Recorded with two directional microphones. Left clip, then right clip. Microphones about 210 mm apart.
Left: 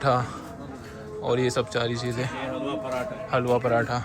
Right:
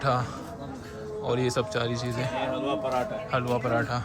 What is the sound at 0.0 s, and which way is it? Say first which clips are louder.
A man's voice: left 3 dB; 10° right (ahead or behind).